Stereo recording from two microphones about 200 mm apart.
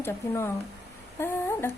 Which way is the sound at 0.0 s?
10° left (ahead or behind).